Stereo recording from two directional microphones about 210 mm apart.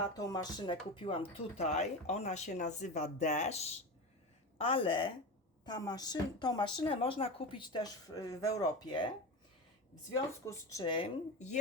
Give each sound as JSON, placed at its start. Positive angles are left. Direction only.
{"t": 0.2, "sound": "speech", "side_deg": 15}
{"t": 10.4, "sound": "speech", "side_deg": 15}